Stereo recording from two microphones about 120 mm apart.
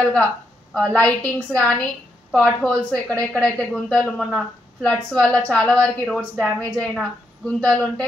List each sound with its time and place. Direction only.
0.0 s a woman's voice: 10° left (ahead or behind)